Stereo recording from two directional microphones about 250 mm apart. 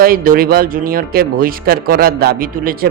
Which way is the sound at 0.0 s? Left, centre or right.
Right.